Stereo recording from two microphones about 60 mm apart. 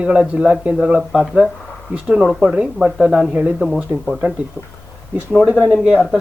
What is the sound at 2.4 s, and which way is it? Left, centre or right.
Speech, centre.